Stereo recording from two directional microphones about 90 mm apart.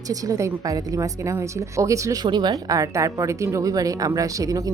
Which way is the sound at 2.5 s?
40° right (ahead or behind).